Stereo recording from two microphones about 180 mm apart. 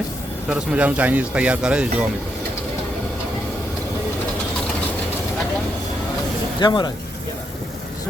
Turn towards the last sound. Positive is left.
turn(degrees=25)  # may be behind; listen again after turning